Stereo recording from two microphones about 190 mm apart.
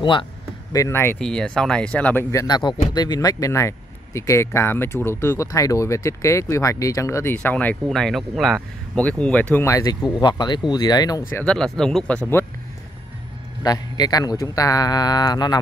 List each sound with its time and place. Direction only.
0.0 s speech: 25° left (ahead or behind)
0.7 s speech: 15° left (ahead or behind)
2.4 s speech: 20° left (ahead or behind)
11.3 s speech: 5° left (ahead or behind)
13.6 s speech: 20° left (ahead or behind)